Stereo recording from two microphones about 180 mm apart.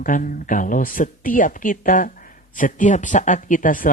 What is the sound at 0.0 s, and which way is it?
Speech, 50° left (ahead or behind).